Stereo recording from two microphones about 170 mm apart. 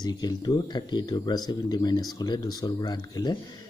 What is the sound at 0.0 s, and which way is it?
Speech, 25° left (ahead or behind).